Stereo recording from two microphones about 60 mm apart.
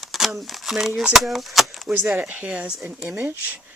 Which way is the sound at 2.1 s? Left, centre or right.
Right.